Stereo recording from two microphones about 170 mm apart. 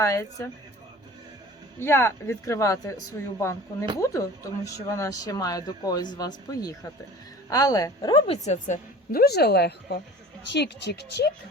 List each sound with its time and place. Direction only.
0.0 s speech: 20° left (ahead or behind)
1.8 s speech: 15° left (ahead or behind)
8.4 s a woman's voice: 45° left (ahead or behind)
9.2 s a woman's voice: 70° left (ahead or behind)
10.5 s speech: 85° left